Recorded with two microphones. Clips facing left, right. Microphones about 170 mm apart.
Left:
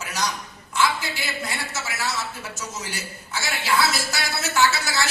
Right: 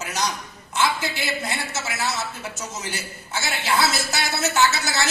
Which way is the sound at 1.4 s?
20° right (ahead or behind).